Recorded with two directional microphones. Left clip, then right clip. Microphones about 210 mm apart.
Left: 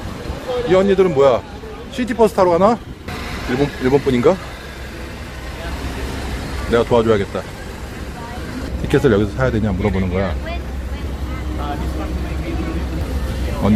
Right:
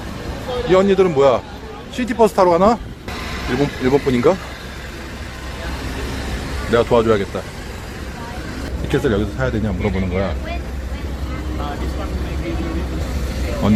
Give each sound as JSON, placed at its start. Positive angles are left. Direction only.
{"t": 0.7, "sound": "a man's voice", "side_deg": -10}
{"t": 3.1, "sound": "vehicle", "side_deg": -45}
{"t": 3.5, "sound": "speech", "side_deg": -10}
{"t": 6.7, "sound": "speech", "side_deg": -5}
{"t": 8.9, "sound": "speech", "side_deg": 10}
{"t": 9.8, "sound": "speech", "side_deg": -5}
{"t": 13.6, "sound": "speech", "side_deg": -5}